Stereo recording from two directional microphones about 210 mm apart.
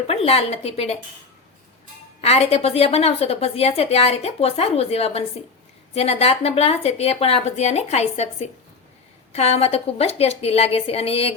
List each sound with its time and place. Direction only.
0.1 s a woman's voice: 30° left (ahead or behind)
2.2 s a woman's voice: 30° left (ahead or behind)